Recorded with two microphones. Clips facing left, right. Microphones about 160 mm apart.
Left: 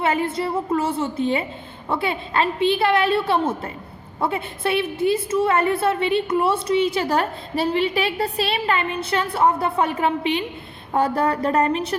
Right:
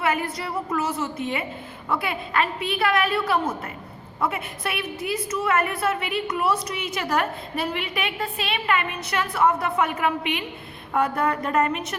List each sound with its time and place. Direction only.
0.0 s a woman's voice: 25° left (ahead or behind)